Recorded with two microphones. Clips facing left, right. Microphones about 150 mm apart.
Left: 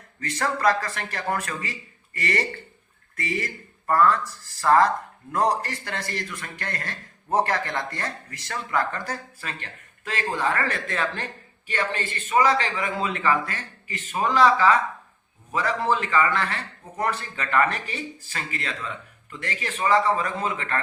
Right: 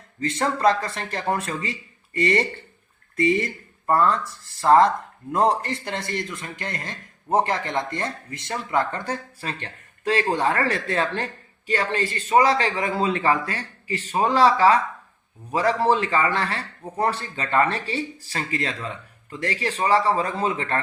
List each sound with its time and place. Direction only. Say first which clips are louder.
0.2 s a man's voice: right 3 dB; 25° right (ahead or behind)